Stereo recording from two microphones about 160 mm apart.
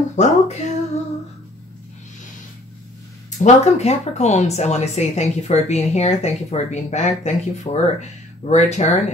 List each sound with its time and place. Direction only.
0.1 s speech: 45° left (ahead or behind)
3.3 s speech: 45° left (ahead or behind)